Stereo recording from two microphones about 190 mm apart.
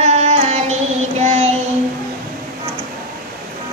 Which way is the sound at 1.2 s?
35° right (ahead or behind).